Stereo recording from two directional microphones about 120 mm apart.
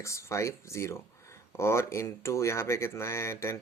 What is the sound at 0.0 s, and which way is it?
Speech, 25° left (ahead or behind).